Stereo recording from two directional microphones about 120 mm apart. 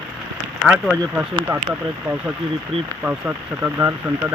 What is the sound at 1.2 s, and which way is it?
Speech, 20° right (ahead or behind).